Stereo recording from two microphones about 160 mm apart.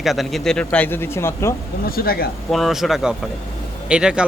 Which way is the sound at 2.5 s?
Centre (ahead or behind).